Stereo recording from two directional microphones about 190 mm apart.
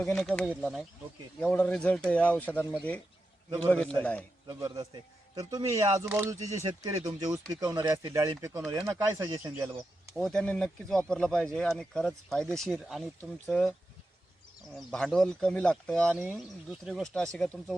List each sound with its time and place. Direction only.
0.0 s speech: centre (ahead or behind)
4.4 s speech: 20° right (ahead or behind)
10.2 s speech: 5° left (ahead or behind)
14.8 s speech: centre (ahead or behind)